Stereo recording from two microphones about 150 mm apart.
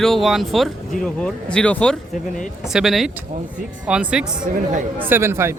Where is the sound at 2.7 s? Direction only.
5° right (ahead or behind).